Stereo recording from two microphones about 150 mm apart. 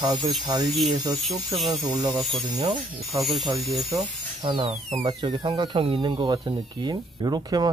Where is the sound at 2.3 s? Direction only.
35° right (ahead or behind).